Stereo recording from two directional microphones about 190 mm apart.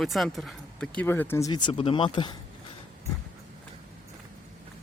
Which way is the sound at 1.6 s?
30° left (ahead or behind).